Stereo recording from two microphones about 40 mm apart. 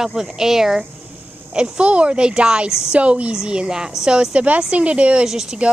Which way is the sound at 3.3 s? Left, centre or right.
Right.